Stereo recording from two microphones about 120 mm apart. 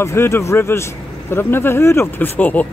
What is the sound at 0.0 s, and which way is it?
Speech, 20° left (ahead or behind).